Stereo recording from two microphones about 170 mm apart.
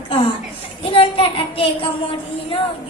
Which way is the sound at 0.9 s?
30° left (ahead or behind).